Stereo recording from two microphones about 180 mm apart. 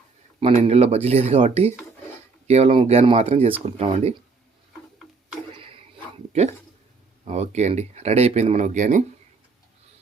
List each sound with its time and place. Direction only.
0.6 s speech: 35° right (ahead or behind)
5.5 s a sound: 30° right (ahead or behind)
7.3 s speech: 35° right (ahead or behind)